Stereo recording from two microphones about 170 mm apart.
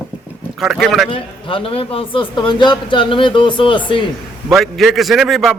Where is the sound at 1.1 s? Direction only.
30° left (ahead or behind).